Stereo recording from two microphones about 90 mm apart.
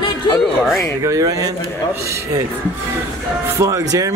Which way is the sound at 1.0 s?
40° right (ahead or behind).